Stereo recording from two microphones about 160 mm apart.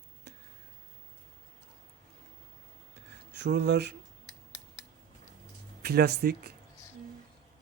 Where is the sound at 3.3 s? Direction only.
90° right.